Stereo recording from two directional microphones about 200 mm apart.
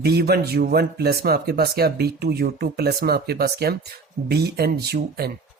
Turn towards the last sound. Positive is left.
turn(degrees=-55)  # may be behind; listen again after turning